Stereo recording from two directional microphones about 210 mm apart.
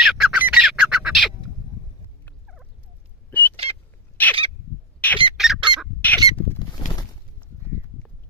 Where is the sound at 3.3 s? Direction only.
10° left (ahead or behind).